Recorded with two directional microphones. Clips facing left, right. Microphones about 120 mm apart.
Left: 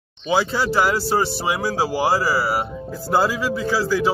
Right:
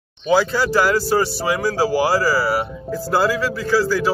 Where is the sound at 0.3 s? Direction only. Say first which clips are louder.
Right 3 dB; 20° left (ahead or behind).